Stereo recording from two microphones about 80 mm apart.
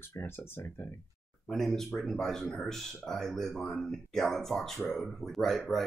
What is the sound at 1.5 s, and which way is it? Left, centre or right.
Speech, centre.